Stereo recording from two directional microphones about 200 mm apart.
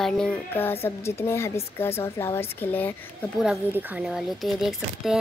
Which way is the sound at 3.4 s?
5° right (ahead or behind).